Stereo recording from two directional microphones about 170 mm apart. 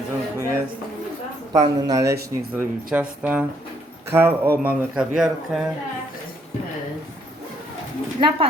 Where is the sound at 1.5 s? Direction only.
20° right (ahead or behind); by 5.7 s 5° right (ahead or behind).